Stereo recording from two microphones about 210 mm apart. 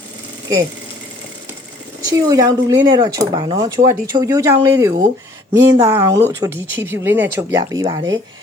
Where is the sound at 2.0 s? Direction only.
15° right (ahead or behind).